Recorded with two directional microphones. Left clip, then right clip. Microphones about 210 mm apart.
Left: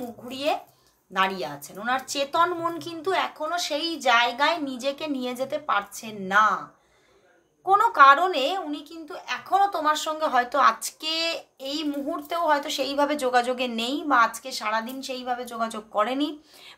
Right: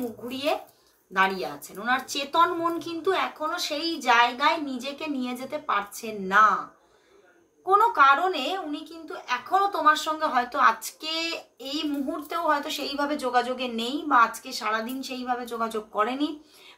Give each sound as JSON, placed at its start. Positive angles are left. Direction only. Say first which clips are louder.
{"t": 0.3, "sound": "a woman's voice", "louder": "left 2 dB", "side_deg": 30}
{"t": 7.6, "sound": "a woman's voice", "louder": "left 3 dB", "side_deg": 35}